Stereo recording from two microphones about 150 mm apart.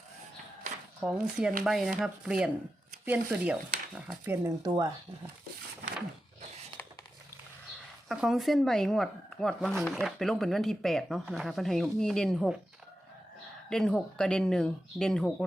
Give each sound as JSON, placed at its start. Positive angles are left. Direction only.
{"t": 1.0, "sound": "speech", "side_deg": -5}
{"t": 4.4, "sound": "speech", "side_deg": -25}
{"t": 8.0, "sound": "speech", "side_deg": -5}
{"t": 13.7, "sound": "speech", "side_deg": 5}